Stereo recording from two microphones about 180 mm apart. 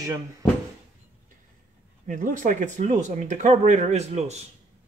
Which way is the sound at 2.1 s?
45° right (ahead or behind).